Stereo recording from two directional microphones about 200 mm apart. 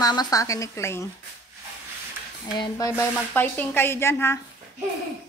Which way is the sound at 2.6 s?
15° left (ahead or behind).